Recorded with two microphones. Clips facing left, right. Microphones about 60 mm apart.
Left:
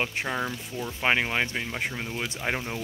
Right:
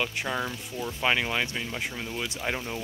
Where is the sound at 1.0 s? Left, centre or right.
Left.